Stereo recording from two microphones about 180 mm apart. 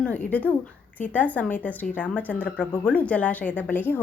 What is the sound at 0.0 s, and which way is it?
A woman's voice, 10° left (ahead or behind).